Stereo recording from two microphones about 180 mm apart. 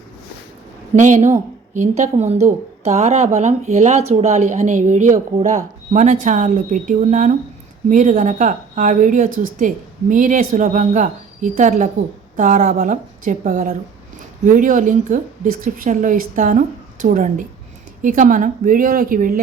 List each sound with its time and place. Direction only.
0.9 s speech: 40° right (ahead or behind)